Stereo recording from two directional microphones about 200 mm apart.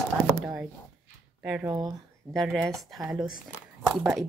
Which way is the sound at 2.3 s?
Centre (ahead or behind).